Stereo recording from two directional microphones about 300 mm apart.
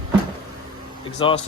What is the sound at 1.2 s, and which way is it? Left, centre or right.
Speech, centre.